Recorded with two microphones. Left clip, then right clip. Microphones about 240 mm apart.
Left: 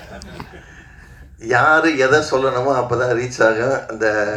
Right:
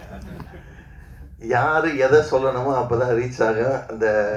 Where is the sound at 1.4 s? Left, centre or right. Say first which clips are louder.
Left 5 dB; left.